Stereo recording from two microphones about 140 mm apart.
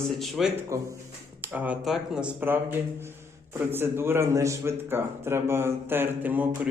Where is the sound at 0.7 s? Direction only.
20° right (ahead or behind).